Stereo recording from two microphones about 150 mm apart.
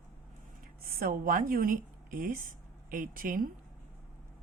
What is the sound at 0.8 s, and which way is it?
A woman's voice, 65° right (ahead or behind).